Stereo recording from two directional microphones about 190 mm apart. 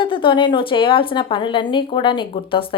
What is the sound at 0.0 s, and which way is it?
A woman's voice, 25° left (ahead or behind).